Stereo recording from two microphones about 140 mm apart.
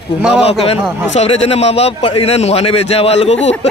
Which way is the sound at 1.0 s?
50° left (ahead or behind).